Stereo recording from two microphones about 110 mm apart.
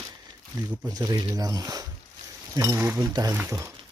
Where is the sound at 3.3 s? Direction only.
25° right (ahead or behind).